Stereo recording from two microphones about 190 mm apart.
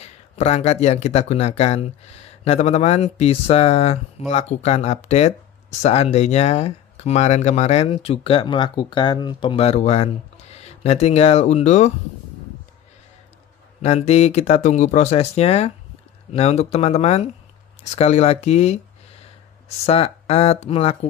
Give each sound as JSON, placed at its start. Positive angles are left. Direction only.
{"t": 0.0, "sound": "speech", "side_deg": 35}
{"t": 13.7, "sound": "speech", "side_deg": 35}
{"t": 19.9, "sound": "speech", "side_deg": 30}